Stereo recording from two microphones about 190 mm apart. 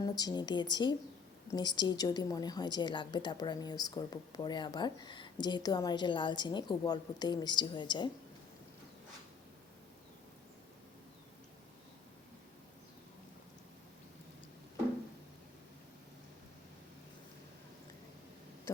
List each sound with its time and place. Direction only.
0.0 s a woman's voice: 20° left (ahead or behind)